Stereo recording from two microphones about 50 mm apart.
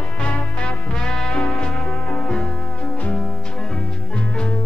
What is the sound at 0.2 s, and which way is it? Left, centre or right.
Music, left.